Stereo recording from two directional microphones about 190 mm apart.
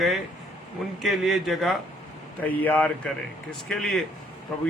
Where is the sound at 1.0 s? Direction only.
Centre (ahead or behind).